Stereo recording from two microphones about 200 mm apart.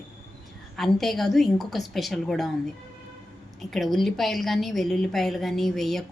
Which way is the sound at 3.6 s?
Centre (ahead or behind).